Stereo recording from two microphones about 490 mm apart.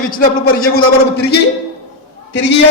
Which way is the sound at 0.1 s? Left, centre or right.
Centre.